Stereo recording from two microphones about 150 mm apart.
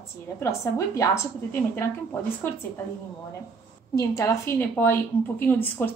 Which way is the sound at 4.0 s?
20° left (ahead or behind).